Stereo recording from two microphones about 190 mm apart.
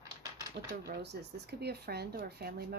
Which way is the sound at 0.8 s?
60° right (ahead or behind).